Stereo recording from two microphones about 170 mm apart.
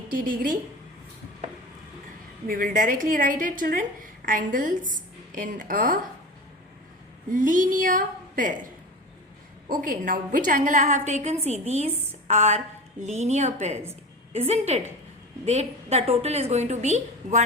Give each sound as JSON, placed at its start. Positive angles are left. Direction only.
{"t": 0.1, "sound": "a woman's voice", "side_deg": -55}
{"t": 2.5, "sound": "a woman's voice", "side_deg": -55}
{"t": 7.3, "sound": "a woman's voice", "side_deg": -50}
{"t": 9.6, "sound": "a woman's voice", "side_deg": -50}